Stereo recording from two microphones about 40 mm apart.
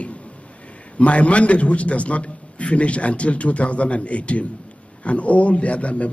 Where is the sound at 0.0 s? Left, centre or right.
Left.